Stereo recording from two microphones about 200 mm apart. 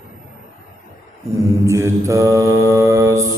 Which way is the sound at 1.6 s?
15° right (ahead or behind).